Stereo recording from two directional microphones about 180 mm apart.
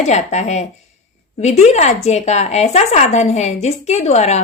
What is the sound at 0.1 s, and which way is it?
Speech, 40° left (ahead or behind).